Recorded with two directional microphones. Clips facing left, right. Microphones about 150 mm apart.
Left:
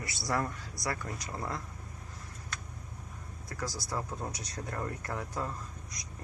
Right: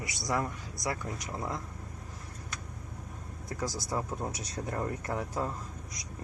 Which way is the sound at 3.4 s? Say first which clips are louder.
Right 3 dB; 15° right (ahead or behind).